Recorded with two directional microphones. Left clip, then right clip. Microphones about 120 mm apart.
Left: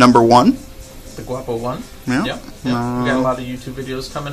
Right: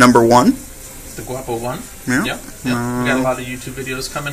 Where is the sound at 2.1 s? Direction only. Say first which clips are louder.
Right 2 dB; 10° left (ahead or behind).